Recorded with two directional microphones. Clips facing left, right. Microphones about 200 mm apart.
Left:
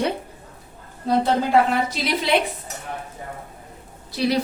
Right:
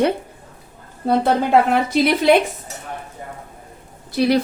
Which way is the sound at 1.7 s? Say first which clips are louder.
Right 6 dB; 55° right (ahead or behind).